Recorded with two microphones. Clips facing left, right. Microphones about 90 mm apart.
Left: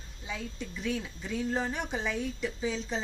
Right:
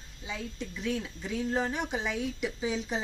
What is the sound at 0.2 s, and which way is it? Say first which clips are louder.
A woman's voice: right 1 dB; centre (ahead or behind).